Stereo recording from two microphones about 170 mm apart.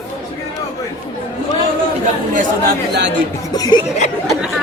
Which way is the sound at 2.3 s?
50° right (ahead or behind).